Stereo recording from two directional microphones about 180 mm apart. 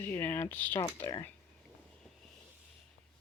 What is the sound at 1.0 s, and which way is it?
Speech, 25° left (ahead or behind).